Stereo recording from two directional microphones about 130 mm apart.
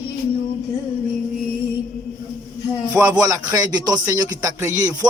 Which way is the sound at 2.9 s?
30° right (ahead or behind).